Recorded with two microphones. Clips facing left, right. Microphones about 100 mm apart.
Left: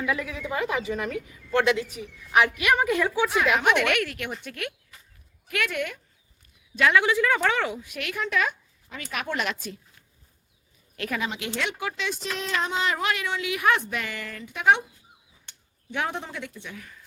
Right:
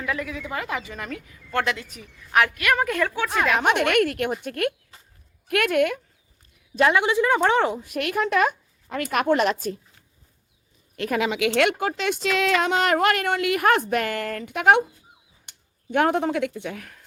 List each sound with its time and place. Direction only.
0.0 s a woman's voice: 10° left (ahead or behind)
0.3 s a woman's voice: 20° left (ahead or behind)
3.6 s speech: 40° right (ahead or behind)
4.9 s a sound: 30° right (ahead or behind)
5.5 s a woman's voice: 55° right (ahead or behind)
6.9 s speech: 25° right (ahead or behind); by 9.7 s 40° right (ahead or behind)
11.2 s speech: 90° right
11.8 s speech: 45° right (ahead or behind)
12.1 s a woman's voice: 85° right; by 14.8 s 60° right (ahead or behind)
15.9 s a woman's voice: 50° right (ahead or behind); by 17.0 s 65° right (ahead or behind)